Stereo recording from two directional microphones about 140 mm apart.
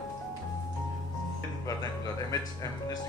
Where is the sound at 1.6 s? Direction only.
25° left (ahead or behind).